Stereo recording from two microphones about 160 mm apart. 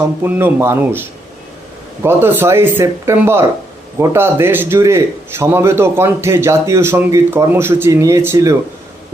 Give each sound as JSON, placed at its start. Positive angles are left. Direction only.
{"t": 0.2, "sound": "a man's voice", "side_deg": -15}
{"t": 2.0, "sound": "a man's voice", "side_deg": -15}